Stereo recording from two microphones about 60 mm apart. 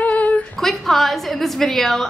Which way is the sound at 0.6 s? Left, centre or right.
Centre.